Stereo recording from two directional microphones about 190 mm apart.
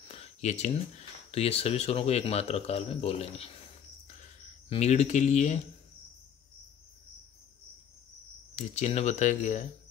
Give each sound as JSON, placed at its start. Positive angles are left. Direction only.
{"t": 0.1, "sound": "speech", "side_deg": 35}
{"t": 4.6, "sound": "speech", "side_deg": 35}
{"t": 8.5, "sound": "speech", "side_deg": 35}